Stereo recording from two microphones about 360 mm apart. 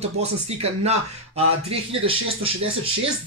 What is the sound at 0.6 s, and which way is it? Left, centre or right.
Speech, centre.